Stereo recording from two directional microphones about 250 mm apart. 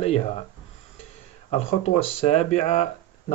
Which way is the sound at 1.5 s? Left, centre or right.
Left.